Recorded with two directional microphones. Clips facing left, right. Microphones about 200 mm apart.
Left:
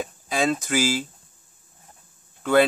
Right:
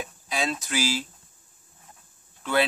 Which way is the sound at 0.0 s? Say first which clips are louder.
Left 5 dB; 50° left (ahead or behind).